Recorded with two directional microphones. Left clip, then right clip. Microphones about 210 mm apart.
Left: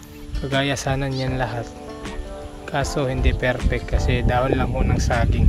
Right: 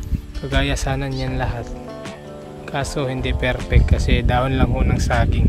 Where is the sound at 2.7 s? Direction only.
10° right (ahead or behind).